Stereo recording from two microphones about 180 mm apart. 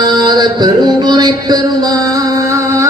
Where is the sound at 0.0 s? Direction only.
25° right (ahead or behind).